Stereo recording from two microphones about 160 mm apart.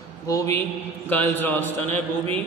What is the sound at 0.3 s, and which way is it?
A man's voice, 20° left (ahead or behind).